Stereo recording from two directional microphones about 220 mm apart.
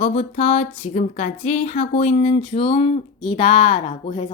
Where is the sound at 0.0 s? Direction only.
30° left (ahead or behind).